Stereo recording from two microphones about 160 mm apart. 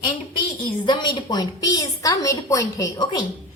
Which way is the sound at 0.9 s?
25° left (ahead or behind).